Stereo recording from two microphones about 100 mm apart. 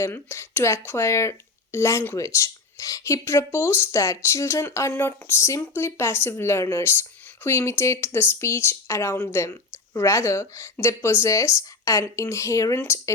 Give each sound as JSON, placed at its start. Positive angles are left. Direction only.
{"t": 0.0, "sound": "speech", "side_deg": 25}